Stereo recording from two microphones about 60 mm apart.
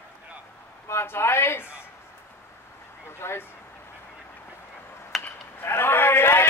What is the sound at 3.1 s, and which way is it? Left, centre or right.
Speech, left.